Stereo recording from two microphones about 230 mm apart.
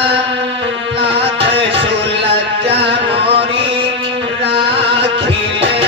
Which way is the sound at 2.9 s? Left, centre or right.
Right.